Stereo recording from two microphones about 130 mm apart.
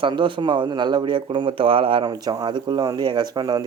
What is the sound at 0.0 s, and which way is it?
Speech, 40° right (ahead or behind).